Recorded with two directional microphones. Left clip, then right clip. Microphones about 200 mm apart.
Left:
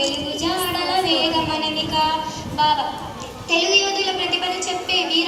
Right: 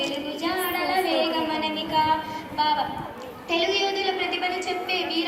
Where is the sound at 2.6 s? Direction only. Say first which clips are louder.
Left 5 dB; 20° right (ahead or behind).